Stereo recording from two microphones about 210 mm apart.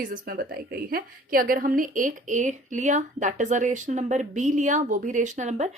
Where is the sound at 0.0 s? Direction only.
45° right (ahead or behind).